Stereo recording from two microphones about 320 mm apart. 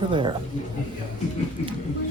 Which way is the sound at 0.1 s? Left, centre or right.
Centre.